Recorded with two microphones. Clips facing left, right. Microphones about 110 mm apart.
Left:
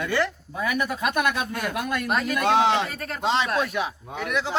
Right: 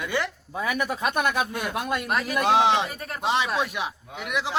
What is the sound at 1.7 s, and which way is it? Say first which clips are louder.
Speech: right 1 dB; 30° right (ahead or behind).